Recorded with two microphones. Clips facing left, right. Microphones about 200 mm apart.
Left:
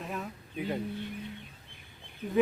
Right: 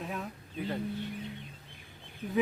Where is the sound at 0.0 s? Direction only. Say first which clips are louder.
Even; centre (ahead or behind).